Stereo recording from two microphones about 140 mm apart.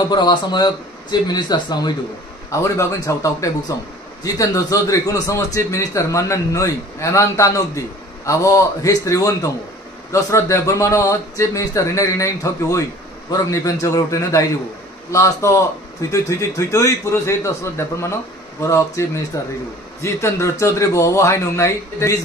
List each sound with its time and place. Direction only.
0.0 s a man's voice: 30° left (ahead or behind)